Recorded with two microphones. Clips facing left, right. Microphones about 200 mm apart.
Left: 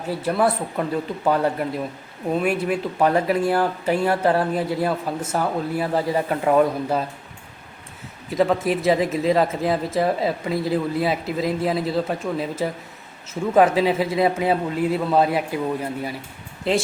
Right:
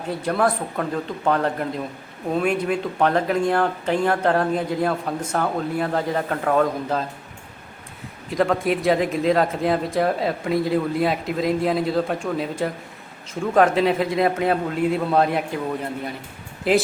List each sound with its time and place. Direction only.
0.0 s speech: 5° left (ahead or behind)
8.3 s speech: centre (ahead or behind)